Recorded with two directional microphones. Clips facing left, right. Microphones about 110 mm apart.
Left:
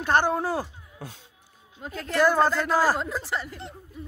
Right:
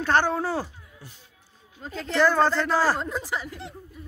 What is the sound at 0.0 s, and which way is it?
Speech, 15° left (ahead or behind).